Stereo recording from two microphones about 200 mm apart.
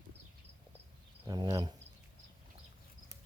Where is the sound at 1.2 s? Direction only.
20° right (ahead or behind).